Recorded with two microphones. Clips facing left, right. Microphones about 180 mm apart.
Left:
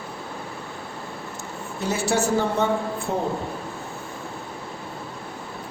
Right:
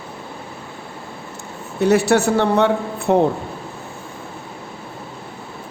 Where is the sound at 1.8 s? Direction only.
65° right (ahead or behind).